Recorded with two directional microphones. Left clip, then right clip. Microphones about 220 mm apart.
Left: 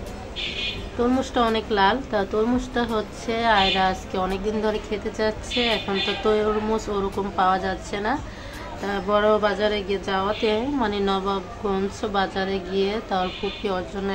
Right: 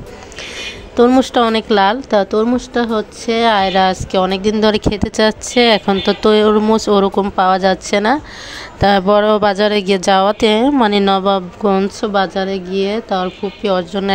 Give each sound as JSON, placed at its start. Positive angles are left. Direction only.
{"t": 0.9, "sound": "a woman's voice", "side_deg": -40}